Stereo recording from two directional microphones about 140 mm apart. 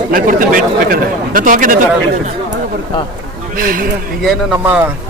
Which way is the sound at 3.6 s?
80° right.